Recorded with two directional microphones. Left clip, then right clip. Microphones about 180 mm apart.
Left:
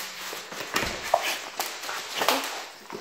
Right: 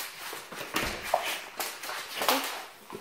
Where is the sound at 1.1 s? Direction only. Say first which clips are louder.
Left 5 dB; 35° left (ahead or behind).